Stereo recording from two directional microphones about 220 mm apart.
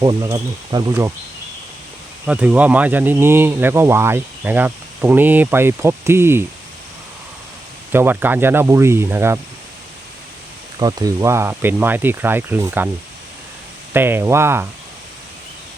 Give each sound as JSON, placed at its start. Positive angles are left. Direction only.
{"t": 0.0, "sound": "speech", "side_deg": -20}
{"t": 2.2, "sound": "speech", "side_deg": -5}
{"t": 7.9, "sound": "speech", "side_deg": -10}
{"t": 10.8, "sound": "speech", "side_deg": -15}
{"t": 13.9, "sound": "speech", "side_deg": -10}